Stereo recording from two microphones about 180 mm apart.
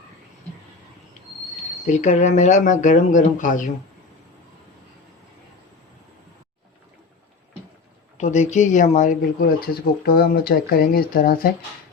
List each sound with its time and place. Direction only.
1.9 s speech: 40° left (ahead or behind)
8.2 s speech: 40° left (ahead or behind); by 11.5 s 55° left (ahead or behind)